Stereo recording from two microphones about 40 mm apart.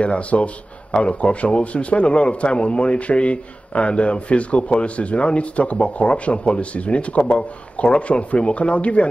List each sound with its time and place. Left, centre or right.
0.0 s a man's voice: left